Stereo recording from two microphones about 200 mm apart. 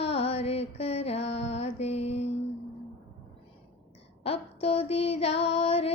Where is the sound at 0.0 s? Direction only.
30° left (ahead or behind).